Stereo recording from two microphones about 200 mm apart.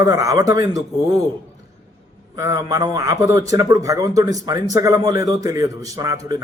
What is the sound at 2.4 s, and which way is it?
A man's voice, 15° right (ahead or behind).